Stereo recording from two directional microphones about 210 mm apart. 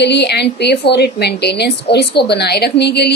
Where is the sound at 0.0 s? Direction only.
55° left (ahead or behind).